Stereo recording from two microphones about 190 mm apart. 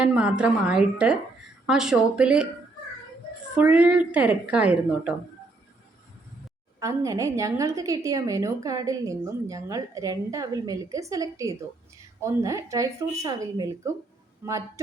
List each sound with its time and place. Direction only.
0.0 s a woman's voice: 5° right (ahead or behind)
3.6 s a woman's voice: 5° right (ahead or behind)
6.7 s a woman's voice: 15° right (ahead or behind)